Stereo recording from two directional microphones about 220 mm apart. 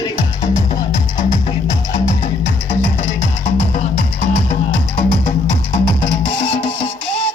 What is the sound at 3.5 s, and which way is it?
Music, 30° left (ahead or behind).